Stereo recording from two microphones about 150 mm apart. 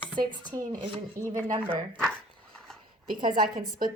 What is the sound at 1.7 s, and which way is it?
Speech, 10° left (ahead or behind).